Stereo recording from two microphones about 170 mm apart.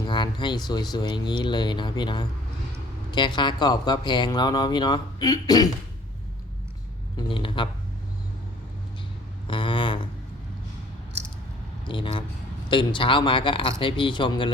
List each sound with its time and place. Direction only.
0.0 s speech: 25° left (ahead or behind)
7.2 s speech: 30° left (ahead or behind)
9.5 s a sound: 30° left (ahead or behind)
11.9 s speech: 30° left (ahead or behind)